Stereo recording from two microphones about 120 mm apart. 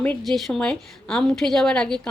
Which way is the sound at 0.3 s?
Centre (ahead or behind).